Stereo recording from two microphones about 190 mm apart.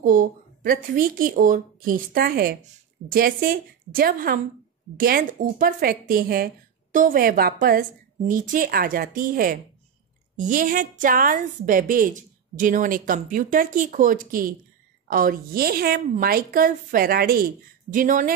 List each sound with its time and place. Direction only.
0.0 s a woman's voice: 45° right (ahead or behind)